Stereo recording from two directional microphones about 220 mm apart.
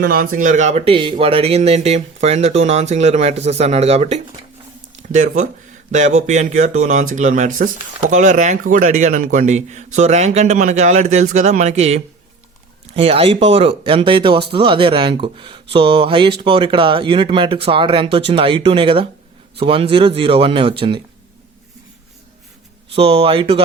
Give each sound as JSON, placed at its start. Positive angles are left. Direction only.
{"t": 0.0, "sound": "a man's voice", "side_deg": -40}
{"t": 23.0, "sound": "speech", "side_deg": -25}